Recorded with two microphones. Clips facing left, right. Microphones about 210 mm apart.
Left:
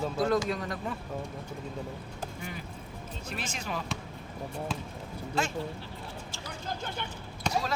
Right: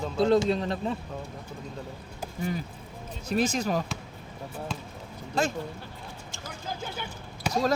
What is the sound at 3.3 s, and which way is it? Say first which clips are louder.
Speech: right 12 dB; 40° right (ahead or behind).